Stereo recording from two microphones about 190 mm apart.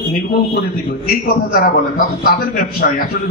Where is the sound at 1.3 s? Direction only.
50° left (ahead or behind).